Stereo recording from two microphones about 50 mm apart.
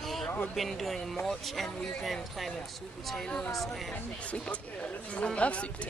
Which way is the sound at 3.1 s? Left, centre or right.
Centre.